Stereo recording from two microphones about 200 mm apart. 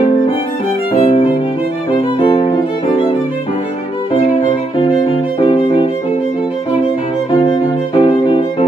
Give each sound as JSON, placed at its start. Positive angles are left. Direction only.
{"t": 0.9, "sound": "violin", "side_deg": 30}
{"t": 5.4, "sound": "music", "side_deg": 30}
{"t": 7.4, "sound": "violin", "side_deg": 25}